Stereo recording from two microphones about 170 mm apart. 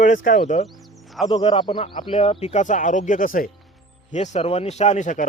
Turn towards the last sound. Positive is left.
turn(degrees=45)  # may be behind; listen again after turning